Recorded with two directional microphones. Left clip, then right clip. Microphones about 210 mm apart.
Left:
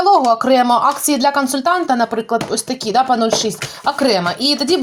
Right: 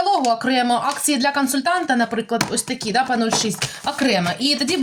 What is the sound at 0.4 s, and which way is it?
A woman's voice, 15° left (ahead or behind).